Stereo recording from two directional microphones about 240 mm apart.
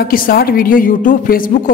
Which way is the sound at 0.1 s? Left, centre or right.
Left.